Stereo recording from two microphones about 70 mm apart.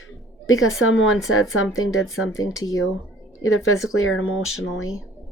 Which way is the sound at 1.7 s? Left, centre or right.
Left.